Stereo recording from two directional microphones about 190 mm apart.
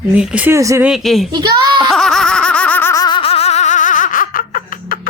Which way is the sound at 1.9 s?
Centre (ahead or behind).